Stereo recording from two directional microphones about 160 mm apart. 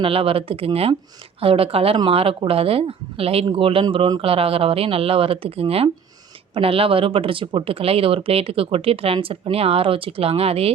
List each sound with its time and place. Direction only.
0.0 s speech: 35° right (ahead or behind)